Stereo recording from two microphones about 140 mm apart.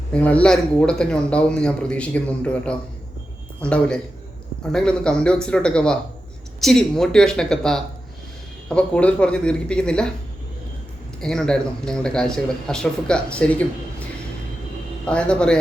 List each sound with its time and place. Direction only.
0.1 s speech: 10° left (ahead or behind)
11.2 s speech: 5° left (ahead or behind)
15.0 s speech: 5° left (ahead or behind)